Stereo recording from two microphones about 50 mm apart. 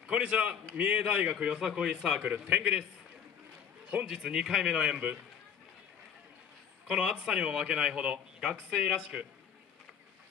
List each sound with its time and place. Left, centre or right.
0.0 s a man's voice: centre
1.3 s speech: centre
2.2 s a man's voice: right
2.5 s speech: centre
3.9 s speech: centre
4.9 s a man's voice: right
6.9 s speech: centre